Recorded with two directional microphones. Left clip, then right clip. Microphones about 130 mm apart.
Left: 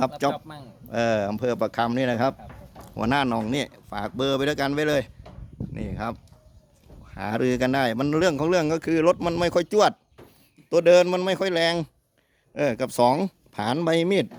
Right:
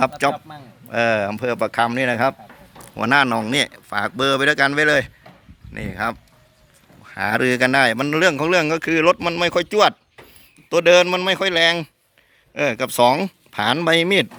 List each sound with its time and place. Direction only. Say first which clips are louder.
0.3 s speech: right 3 dB; 35° left (ahead or behind)
0.9 s speech: right 5 dB; 15° left (ahead or behind)
9.1 s speech: right 4 dB; 30° left (ahead or behind)
10.7 s speech: right 3 dB; 20° left (ahead or behind)